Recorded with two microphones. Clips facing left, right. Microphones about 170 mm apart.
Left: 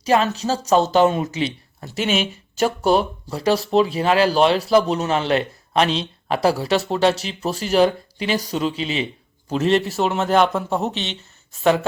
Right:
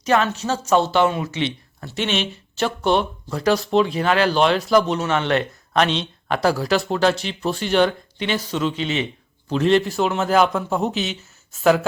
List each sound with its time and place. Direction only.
0.0 s speech: 35° left (ahead or behind)
2.0 s speech: 5° left (ahead or behind)
2.6 s speech: 40° left (ahead or behind)
3.6 s a man's voice: centre (ahead or behind)
3.8 s speech: 30° left (ahead or behind)
6.6 s a man's voice: centre (ahead or behind)
7.4 s speech: 35° left (ahead or behind)
9.5 s a man's voice: centre (ahead or behind)